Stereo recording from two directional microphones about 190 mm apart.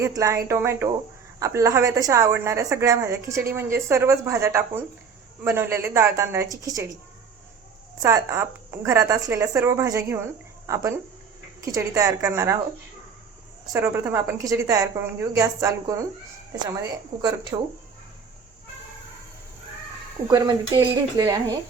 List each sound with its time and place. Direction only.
0.0 s a woman's voice: 15° right (ahead or behind)
8.0 s a woman's voice: 15° right (ahead or behind)
13.7 s a woman's voice: 10° right (ahead or behind)
17.5 s speech: 20° right (ahead or behind)
20.3 s speech: 15° right (ahead or behind)